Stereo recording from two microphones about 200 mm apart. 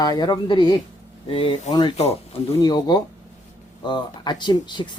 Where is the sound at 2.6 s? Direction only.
20° left (ahead or behind).